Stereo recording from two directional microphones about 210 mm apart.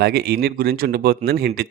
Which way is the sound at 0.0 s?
50° right (ahead or behind).